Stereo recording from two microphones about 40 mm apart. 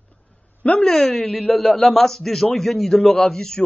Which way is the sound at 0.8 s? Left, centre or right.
Centre.